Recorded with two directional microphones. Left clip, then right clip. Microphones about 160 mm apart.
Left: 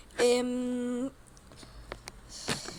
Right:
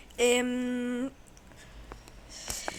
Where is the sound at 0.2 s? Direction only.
5° left (ahead or behind).